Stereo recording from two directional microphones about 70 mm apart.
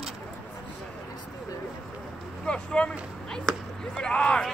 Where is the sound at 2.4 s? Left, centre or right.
Centre.